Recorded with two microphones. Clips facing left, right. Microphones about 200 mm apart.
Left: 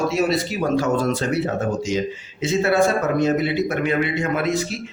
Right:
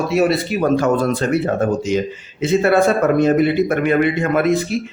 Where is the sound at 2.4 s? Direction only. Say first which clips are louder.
Right 4 dB; 55° right (ahead or behind).